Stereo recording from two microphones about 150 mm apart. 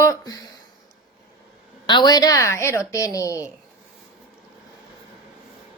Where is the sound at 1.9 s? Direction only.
30° left (ahead or behind).